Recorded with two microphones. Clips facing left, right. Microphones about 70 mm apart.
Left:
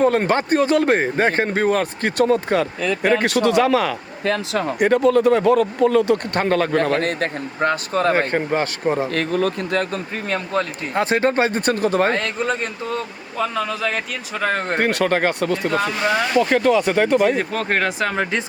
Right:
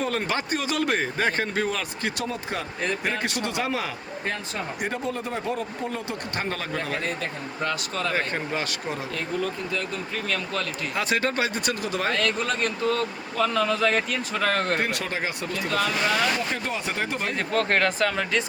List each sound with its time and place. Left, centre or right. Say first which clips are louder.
0.0 s speech: left 10 dB; left
7.6 s speech: left 9 dB; left
9.1 s speech: left 8 dB; left
10.2 s speech: left 8 dB; left
12.2 s speech: left 2 dB; left
14.8 s speech: left 9 dB; left
16.4 s speech: left 13 dB; left
17.3 s speech: left 2 dB; centre
18.0 s speech: left 3 dB; left